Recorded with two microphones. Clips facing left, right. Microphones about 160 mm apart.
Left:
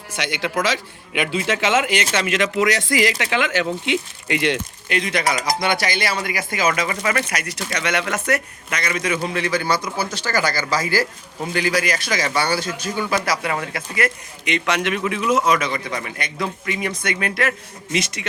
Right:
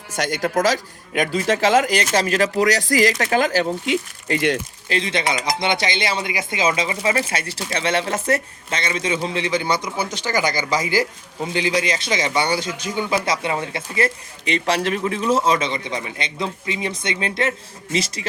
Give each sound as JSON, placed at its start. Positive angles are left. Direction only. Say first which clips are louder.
{"t": 0.1, "sound": "speech", "louder": "right 3 dB", "side_deg": -40}
{"t": 4.9, "sound": "a man's voice", "louder": "even", "side_deg": -25}